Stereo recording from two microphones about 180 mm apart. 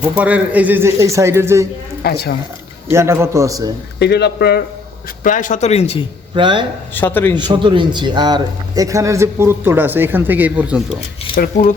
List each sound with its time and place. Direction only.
0.2 s speech: 10° right (ahead or behind)
2.0 s speech: 60° left (ahead or behind)
2.9 s speech: 15° right (ahead or behind)
4.0 s speech: 70° left (ahead or behind)
5.2 s speech: 45° left (ahead or behind)
6.3 s speech: 25° right (ahead or behind)
6.9 s a man's voice: 10° left (ahead or behind)
7.3 s speech: 25° right (ahead or behind); by 10.8 s 5° right (ahead or behind)
11.3 s a sound: 30° left (ahead or behind)